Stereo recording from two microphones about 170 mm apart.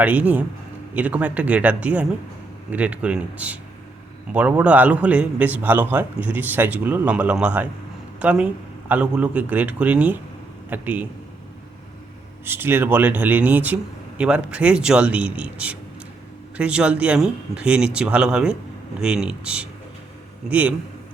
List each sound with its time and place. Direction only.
0.0 s a man's voice: 10° right (ahead or behind)
12.5 s a man's voice: 15° right (ahead or behind)